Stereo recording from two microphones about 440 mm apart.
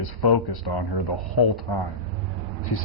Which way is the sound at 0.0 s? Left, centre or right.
Left.